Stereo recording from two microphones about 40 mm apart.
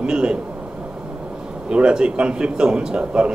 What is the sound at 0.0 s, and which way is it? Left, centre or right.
Speech, right.